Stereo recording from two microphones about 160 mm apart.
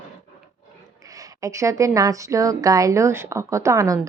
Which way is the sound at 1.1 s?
20° right (ahead or behind).